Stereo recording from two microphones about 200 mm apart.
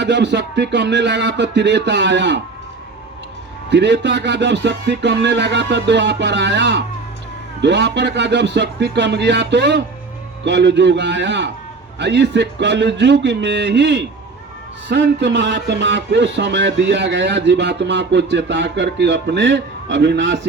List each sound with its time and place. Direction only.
0.0 s speech: 60° right (ahead or behind)
3.7 s speech: 60° right (ahead or behind)